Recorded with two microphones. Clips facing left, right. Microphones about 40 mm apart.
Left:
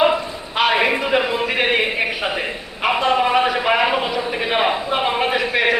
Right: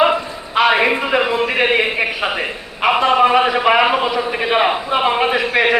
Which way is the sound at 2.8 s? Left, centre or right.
Centre.